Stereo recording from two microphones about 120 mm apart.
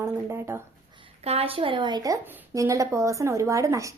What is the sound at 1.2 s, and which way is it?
A woman's voice, 55° right (ahead or behind).